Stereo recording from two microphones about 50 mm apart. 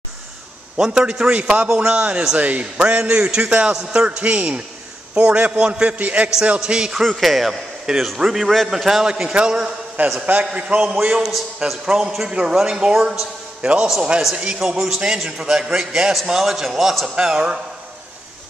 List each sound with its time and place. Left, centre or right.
0.7 s a man's voice: centre
6.6 s a man's voice: centre
7.0 s a man's voice: centre
9.3 s a man's voice: centre
11.2 s speech: centre
11.8 s a man's voice: centre
17.1 s a man's voice: centre